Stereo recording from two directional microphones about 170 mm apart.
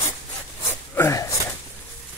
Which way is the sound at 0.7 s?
15° left (ahead or behind).